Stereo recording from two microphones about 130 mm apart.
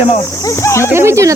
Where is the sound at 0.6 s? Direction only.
20° left (ahead or behind).